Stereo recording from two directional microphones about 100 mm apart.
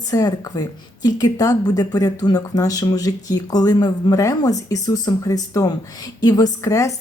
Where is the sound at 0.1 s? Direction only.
35° left (ahead or behind).